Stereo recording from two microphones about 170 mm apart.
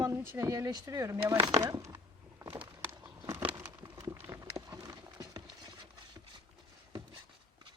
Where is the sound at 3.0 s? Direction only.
25° right (ahead or behind).